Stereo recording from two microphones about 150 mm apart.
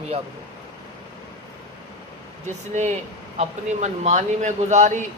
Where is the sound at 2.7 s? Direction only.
50° right (ahead or behind).